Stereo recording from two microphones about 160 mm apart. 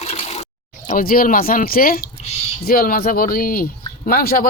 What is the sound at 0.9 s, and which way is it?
Speech, 65° left (ahead or behind).